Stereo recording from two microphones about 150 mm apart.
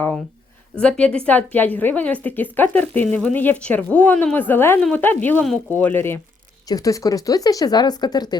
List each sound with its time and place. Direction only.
0.8 s speech: 5° left (ahead or behind); by 8.4 s 25° left (ahead or behind)